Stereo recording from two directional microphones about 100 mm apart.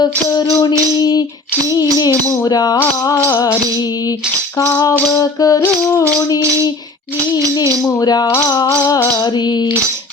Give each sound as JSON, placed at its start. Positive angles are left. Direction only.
{"t": 0.0, "sound": "music", "side_deg": 45}
{"t": 0.9, "sound": "humming", "side_deg": 40}
{"t": 1.7, "sound": "music", "side_deg": 40}
{"t": 5.1, "sound": "music", "side_deg": 40}
{"t": 5.6, "sound": "music", "side_deg": 25}
{"t": 7.9, "sound": "music", "side_deg": 40}
{"t": 8.3, "sound": "music", "side_deg": 30}